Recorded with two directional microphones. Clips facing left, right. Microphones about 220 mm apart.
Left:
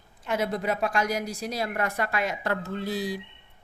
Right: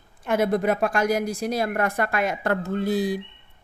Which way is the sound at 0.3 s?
50° right (ahead or behind).